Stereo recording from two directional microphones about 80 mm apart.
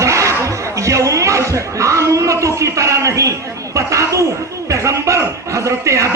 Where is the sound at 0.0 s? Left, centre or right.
Right.